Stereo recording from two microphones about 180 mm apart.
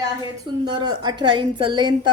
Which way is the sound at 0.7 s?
25° right (ahead or behind).